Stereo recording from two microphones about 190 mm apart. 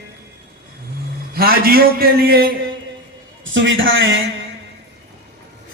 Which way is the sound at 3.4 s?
80° right.